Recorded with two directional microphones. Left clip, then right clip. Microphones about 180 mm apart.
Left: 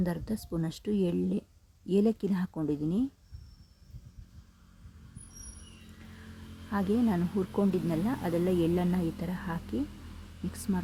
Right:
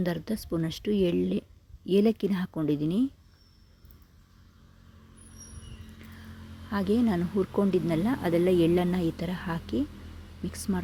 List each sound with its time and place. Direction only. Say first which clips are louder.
0.0 s speech: right 3 dB; 15° right (ahead or behind)
6.7 s speech: right 3 dB; 20° right (ahead or behind)